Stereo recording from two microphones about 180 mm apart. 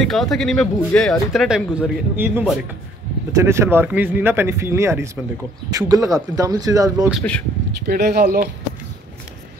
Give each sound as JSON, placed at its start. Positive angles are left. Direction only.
{"t": 0.0, "sound": "speech", "side_deg": 0}
{"t": 7.1, "sound": "speech", "side_deg": 5}
{"t": 7.8, "sound": "speech", "side_deg": -60}